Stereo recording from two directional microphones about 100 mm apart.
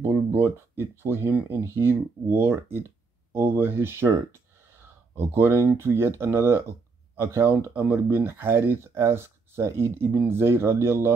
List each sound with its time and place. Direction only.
0.0 s speech: 25° right (ahead or behind)
5.1 s speech: 25° right (ahead or behind)